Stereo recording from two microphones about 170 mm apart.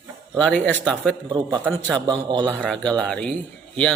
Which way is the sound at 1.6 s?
15° right (ahead or behind).